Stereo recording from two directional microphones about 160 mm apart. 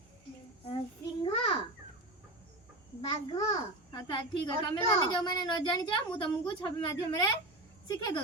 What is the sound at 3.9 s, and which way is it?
A woman's voice, 25° left (ahead or behind).